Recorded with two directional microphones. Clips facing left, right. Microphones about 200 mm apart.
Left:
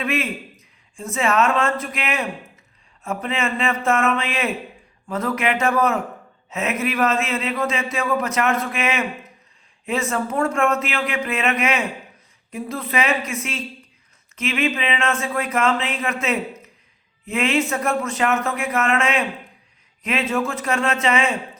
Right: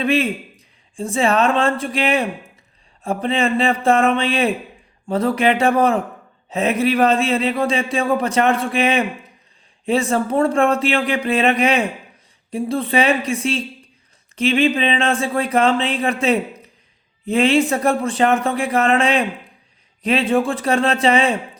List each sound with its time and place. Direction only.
0.0 s speech: 30° right (ahead or behind)
17.2 s speech: 30° right (ahead or behind)